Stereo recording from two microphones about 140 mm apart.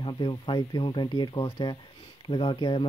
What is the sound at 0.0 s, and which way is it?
Speech, 35° left (ahead or behind).